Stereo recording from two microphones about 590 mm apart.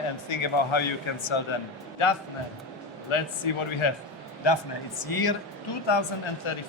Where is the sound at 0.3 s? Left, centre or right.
Left.